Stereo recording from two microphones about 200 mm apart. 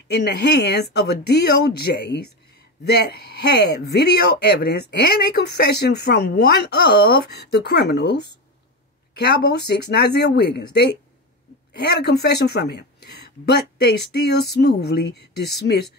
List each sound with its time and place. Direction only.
0.1 s speech: 55° left (ahead or behind)